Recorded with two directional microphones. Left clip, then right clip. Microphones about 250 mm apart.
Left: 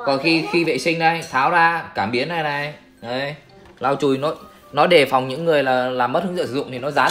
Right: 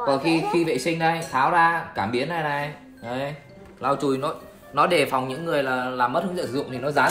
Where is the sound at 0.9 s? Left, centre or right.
Centre.